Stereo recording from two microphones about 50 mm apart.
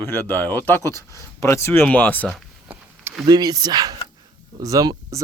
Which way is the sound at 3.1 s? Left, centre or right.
Right.